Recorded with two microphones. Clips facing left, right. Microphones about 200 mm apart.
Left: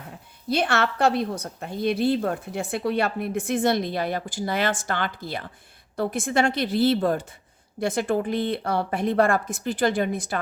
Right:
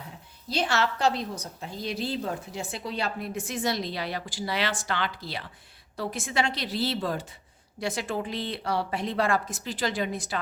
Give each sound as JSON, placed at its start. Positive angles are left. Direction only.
{"t": 0.4, "sound": "a woman's voice", "side_deg": 60}